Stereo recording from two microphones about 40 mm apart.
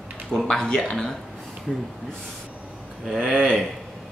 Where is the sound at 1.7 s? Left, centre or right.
Centre.